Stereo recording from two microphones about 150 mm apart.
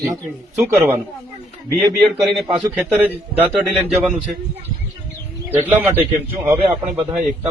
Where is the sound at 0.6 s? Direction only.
15° right (ahead or behind).